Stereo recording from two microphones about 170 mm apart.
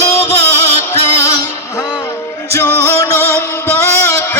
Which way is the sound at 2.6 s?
15° left (ahead or behind).